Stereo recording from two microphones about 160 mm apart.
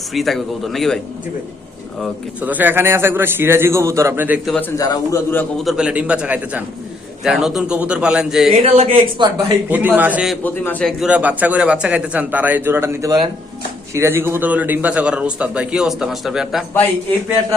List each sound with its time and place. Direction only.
0.1 s a man's voice: centre (ahead or behind)
2.4 s a man's voice: 10° right (ahead or behind)
4.8 s a man's voice: 20° left (ahead or behind)
5.6 s a man's voice: 5° right (ahead or behind)
8.6 s speech: 40° right (ahead or behind)
9.6 s a man's voice: 10° right (ahead or behind)
10.4 s a man's voice: 10° left (ahead or behind)
11.0 s a man's voice: 10° right (ahead or behind)